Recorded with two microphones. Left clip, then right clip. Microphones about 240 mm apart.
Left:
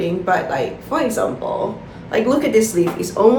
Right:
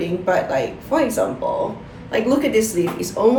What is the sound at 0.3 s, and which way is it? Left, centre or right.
Speech, centre.